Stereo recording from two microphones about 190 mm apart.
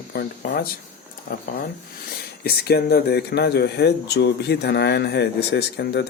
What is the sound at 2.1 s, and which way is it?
Speech, 55° left (ahead or behind).